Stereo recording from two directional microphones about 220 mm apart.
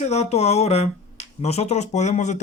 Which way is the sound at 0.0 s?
30° left (ahead or behind).